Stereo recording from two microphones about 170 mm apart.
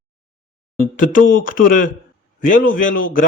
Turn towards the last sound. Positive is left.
turn(degrees=50)  # may be behind; listen again after turning